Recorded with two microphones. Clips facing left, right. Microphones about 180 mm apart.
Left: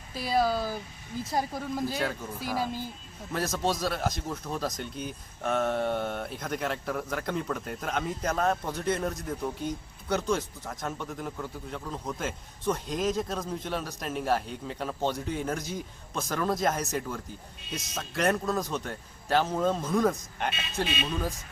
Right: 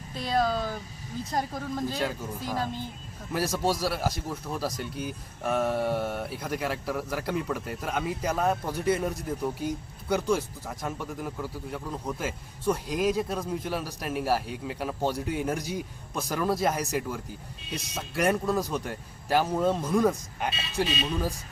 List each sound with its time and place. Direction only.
0.1 s speech: 5° left (ahead or behind)
3.3 s speech: 10° right (ahead or behind)
20.8 s speech: 35° right (ahead or behind)